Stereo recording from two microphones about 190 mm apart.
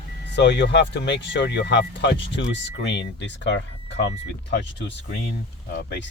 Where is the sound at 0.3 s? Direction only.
65° left (ahead or behind).